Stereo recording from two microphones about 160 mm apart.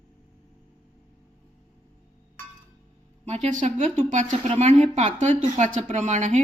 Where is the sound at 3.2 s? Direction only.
45° right (ahead or behind).